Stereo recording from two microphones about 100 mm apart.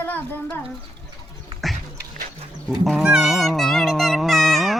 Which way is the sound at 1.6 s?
Centre (ahead or behind).